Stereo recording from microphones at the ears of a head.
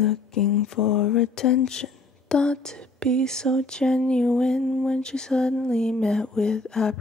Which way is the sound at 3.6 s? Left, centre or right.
Centre.